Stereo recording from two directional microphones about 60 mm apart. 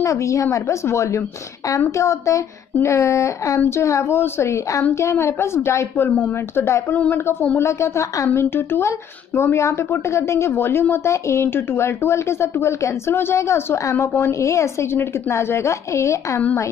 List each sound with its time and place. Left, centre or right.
0.0 s speech: left
3.6 s speech: left
5.9 s speech: left
6.5 s speech: left
7.5 s speech: left
8.4 s speech: left
10.5 s speech: left